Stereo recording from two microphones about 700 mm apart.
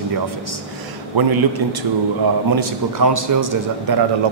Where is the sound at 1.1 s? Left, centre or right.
Right.